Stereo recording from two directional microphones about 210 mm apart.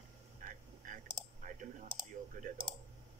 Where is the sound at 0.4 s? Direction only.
40° right (ahead or behind).